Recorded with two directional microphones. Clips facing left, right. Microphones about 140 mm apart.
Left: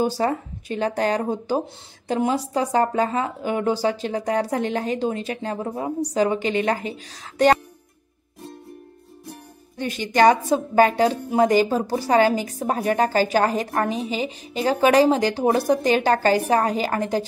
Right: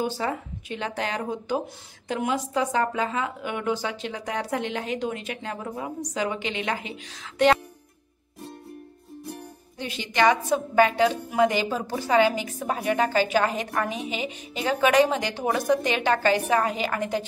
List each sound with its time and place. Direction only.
0.1 s a woman's voice: 40° left (ahead or behind)
9.8 s a woman's voice: 45° left (ahead or behind)